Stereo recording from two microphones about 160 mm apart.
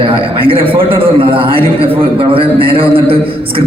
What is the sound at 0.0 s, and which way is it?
A man's voice, 35° right (ahead or behind).